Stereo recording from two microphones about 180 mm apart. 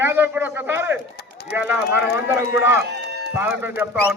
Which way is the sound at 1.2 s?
65° left (ahead or behind).